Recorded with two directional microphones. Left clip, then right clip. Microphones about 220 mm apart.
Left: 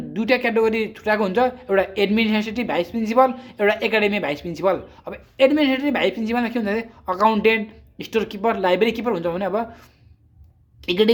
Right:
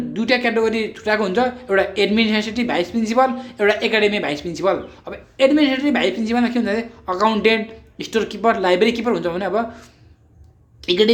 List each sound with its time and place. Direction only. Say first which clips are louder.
0.1 s speech: right 1 dB; 25° left (ahead or behind)
10.8 s a woman's voice: right 3 dB; 25° left (ahead or behind)